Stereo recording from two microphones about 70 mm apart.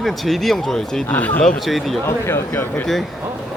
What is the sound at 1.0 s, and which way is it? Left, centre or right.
Speech, left.